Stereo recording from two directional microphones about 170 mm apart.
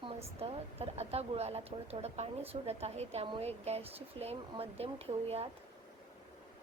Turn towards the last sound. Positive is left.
turn(degrees=-35)  # may be behind; listen again after turning